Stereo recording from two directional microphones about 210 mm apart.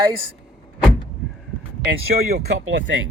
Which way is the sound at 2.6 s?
65° right (ahead or behind).